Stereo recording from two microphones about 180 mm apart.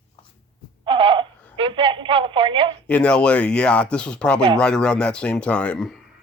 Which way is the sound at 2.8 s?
5° left (ahead or behind).